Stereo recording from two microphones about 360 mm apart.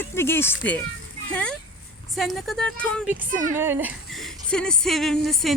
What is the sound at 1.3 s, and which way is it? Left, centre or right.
Child singing, centre.